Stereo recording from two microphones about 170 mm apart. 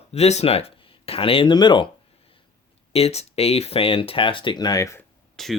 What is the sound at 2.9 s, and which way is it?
Speech, 35° left (ahead or behind).